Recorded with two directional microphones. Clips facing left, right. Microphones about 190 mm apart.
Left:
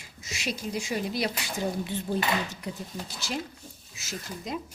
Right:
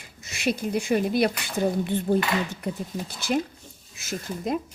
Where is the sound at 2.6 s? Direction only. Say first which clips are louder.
Right 6 dB; 55° right (ahead or behind).